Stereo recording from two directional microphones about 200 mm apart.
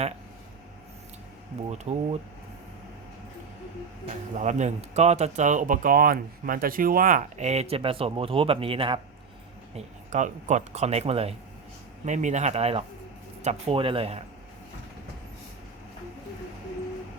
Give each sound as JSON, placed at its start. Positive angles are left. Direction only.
{"t": 1.7, "sound": "speech", "side_deg": -35}
{"t": 4.4, "sound": "speech", "side_deg": -35}